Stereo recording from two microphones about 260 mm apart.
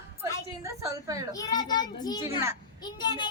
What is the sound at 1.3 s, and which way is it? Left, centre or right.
A child's voice, centre.